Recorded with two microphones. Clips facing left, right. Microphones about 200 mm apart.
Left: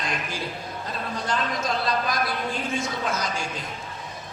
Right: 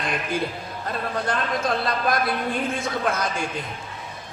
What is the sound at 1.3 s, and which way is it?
A man's voice, 55° right (ahead or behind).